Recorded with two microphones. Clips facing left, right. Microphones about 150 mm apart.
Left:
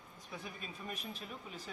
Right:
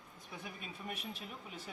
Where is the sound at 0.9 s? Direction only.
65° right (ahead or behind).